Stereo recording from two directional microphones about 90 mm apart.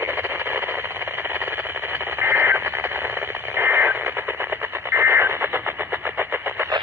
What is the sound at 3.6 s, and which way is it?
Radio, 20° right (ahead or behind).